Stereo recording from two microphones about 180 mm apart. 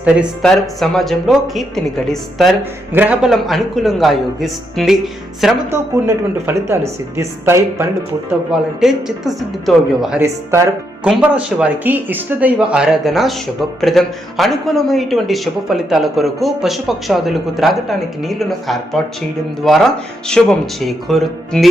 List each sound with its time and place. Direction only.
0.0 s speech: 5° right (ahead or behind)
5.9 s speech: 15° right (ahead or behind)
8.8 s speech: centre (ahead or behind)
10.2 s speech: 15° right (ahead or behind); by 21.7 s centre (ahead or behind)